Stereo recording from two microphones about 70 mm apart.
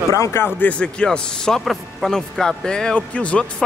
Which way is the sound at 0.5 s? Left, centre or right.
Centre.